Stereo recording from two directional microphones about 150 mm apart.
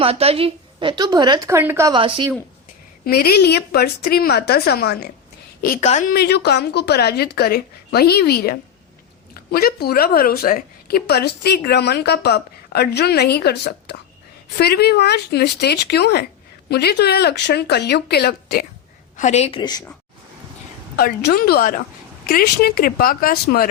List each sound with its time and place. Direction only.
0.0 s a woman's voice: 40° right (ahead or behind); by 1.9 s 15° right (ahead or behind)
1.9 s a woman's voice: 35° right (ahead or behind)
3.0 s a woman's voice: 90° left
5.8 s a woman's voice: 50° left (ahead or behind)
6.1 s a woman's voice: 90° left
19.1 s a woman's voice: 55° left (ahead or behind); by 19.8 s 30° left (ahead or behind)
20.9 s a woman's voice: 90° left